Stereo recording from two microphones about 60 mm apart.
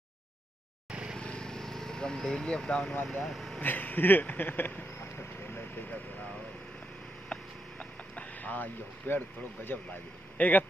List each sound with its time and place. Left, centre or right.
1.1 s vehicle: centre
3.1 s speech: centre
3.6 s vehicle: left
8.2 s speech: left
10.3 s speech: left